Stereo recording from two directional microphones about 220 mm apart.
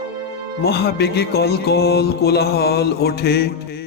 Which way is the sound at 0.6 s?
45° left (ahead or behind).